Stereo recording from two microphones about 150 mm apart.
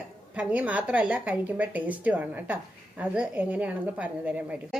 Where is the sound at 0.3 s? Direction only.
10° right (ahead or behind).